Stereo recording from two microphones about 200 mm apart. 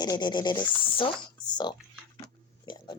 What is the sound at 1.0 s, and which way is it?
Speech, 20° left (ahead or behind).